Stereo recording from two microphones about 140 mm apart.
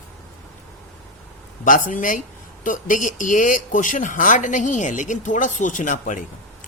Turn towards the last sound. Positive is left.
turn(degrees=65)  # may be behind; listen again after turning